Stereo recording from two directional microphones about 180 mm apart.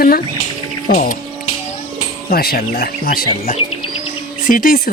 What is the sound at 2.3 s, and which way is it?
Speech, 55° left (ahead or behind).